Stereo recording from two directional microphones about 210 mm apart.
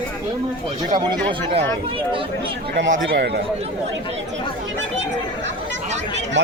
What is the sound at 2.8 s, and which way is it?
Speech, 60° right (ahead or behind).